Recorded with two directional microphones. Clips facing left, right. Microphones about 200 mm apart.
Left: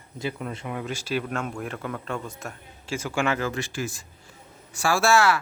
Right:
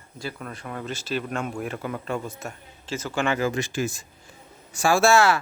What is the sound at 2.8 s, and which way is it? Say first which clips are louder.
Speech: even; 10° left (ahead or behind).